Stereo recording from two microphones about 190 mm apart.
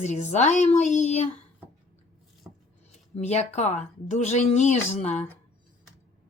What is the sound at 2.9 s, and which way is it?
Speech, 35° left (ahead or behind).